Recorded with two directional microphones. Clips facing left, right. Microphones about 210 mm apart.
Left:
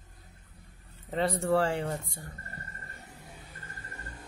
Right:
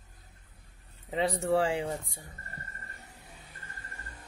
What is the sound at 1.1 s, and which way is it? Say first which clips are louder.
Speech: even; centre (ahead or behind).